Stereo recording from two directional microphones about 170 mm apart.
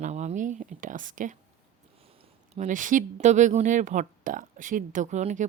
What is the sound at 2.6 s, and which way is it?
Speech, 50° right (ahead or behind).